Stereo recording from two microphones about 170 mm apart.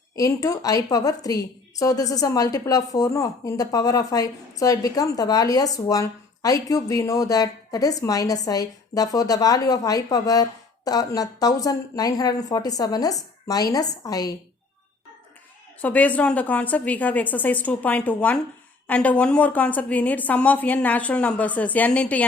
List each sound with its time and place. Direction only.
0.2 s a woman's voice: 20° left (ahead or behind)
15.8 s a woman's voice: 10° left (ahead or behind)